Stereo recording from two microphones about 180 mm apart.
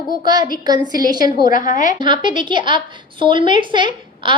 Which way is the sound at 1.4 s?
50° left (ahead or behind).